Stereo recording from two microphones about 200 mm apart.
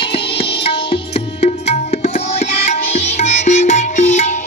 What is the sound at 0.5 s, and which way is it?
Tabla, 25° left (ahead or behind).